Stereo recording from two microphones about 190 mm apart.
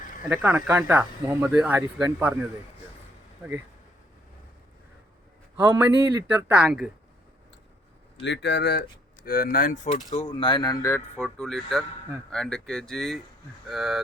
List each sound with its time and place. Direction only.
0.3 s speech: 10° right (ahead or behind)
5.6 s speech: 10° right (ahead or behind)
8.2 s speech: 65° left (ahead or behind)
9.2 s speech: 50° left (ahead or behind); by 11.3 s 15° left (ahead or behind)
11.3 s speech: centre (ahead or behind)